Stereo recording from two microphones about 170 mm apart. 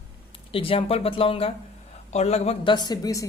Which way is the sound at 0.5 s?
35° left (ahead or behind).